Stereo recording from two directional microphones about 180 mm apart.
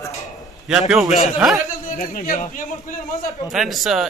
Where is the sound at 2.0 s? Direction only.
50° left (ahead or behind).